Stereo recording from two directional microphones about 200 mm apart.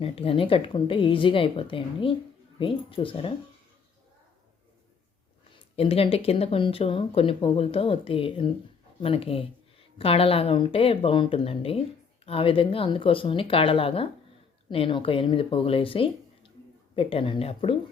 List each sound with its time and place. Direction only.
0.0 s speech: 30° left (ahead or behind)
5.7 s speech: 30° left (ahead or behind)